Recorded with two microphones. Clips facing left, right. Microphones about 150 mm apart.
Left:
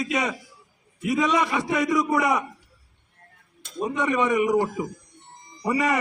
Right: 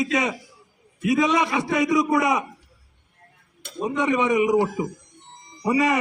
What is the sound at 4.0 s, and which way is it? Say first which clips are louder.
A man's voice: right 2 dB; 20° right (ahead or behind).